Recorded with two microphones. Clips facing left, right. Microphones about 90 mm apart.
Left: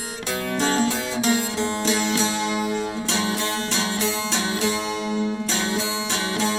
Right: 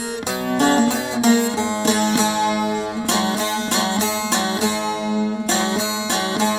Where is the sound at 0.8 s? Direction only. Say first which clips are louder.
Right 5 dB; 20° right (ahead or behind).